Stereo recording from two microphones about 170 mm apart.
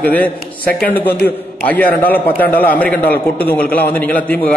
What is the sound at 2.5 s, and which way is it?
Speech, 60° left (ahead or behind).